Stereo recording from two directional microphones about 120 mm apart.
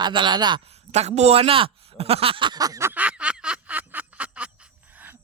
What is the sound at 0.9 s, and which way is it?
A man's voice, 65° right (ahead or behind).